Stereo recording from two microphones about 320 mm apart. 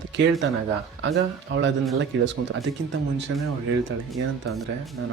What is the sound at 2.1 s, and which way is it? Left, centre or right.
Speech, right.